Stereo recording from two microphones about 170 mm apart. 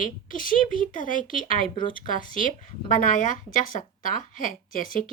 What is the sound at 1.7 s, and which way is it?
Speech, 30° left (ahead or behind).